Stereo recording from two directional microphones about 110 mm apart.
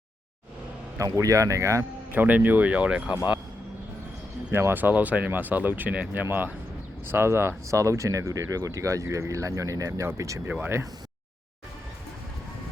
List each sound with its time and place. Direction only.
0.9 s speech: 30° right (ahead or behind)
2.2 s speech: 15° right (ahead or behind)
4.5 s speech: 20° right (ahead or behind)